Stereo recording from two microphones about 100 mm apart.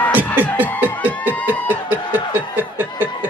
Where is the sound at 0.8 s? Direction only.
20° right (ahead or behind).